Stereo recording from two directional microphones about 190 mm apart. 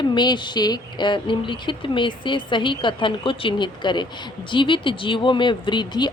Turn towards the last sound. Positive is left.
turn(degrees=25)  # may be behind; listen again after turning